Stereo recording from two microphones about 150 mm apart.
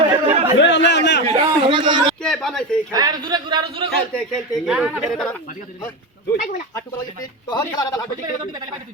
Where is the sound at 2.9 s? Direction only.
25° right (ahead or behind).